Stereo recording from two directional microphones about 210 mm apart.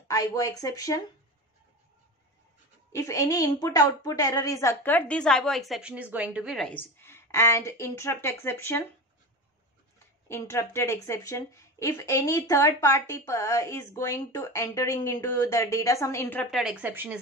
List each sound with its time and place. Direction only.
0.1 s speech: 15° left (ahead or behind)
2.9 s speech: 15° left (ahead or behind)
10.2 s speech: 15° left (ahead or behind); by 17.2 s 10° right (ahead or behind)